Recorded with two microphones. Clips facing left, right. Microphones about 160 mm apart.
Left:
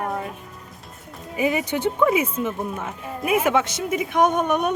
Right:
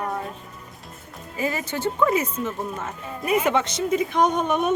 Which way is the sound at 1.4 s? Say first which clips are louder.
Left 4 dB; 15° left (ahead or behind).